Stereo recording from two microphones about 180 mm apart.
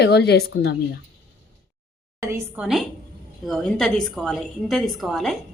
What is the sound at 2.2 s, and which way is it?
Speech, 15° right (ahead or behind).